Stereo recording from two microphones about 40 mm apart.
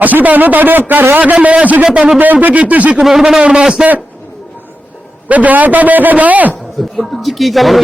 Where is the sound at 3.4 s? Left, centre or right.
Right.